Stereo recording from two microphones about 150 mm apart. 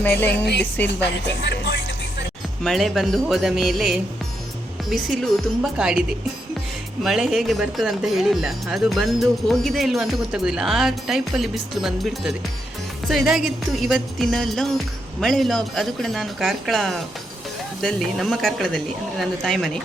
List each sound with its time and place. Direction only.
0.6 s speech: 10° left (ahead or behind)
1.5 s music: 90° left
2.6 s speech: centre (ahead or behind)